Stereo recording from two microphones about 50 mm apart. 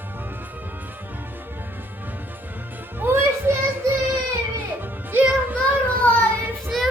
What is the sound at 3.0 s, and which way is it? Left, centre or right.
Music, right.